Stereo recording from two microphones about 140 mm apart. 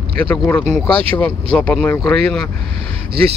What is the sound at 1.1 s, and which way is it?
Speech, 10° left (ahead or behind).